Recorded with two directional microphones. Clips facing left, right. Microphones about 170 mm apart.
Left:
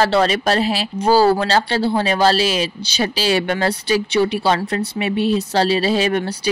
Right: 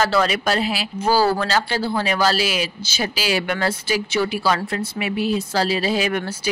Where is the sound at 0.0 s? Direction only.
30° left (ahead or behind).